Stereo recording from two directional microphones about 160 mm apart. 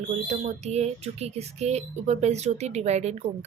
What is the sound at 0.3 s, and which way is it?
Speech, 45° right (ahead or behind).